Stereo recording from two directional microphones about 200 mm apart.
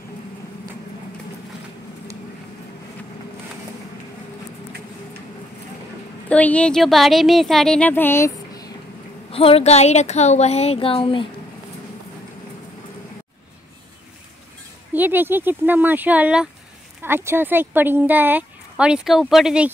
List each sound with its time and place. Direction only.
6.2 s speech: 5° left (ahead or behind)
9.3 s speech: 30° left (ahead or behind)
14.9 s speech: 10° right (ahead or behind)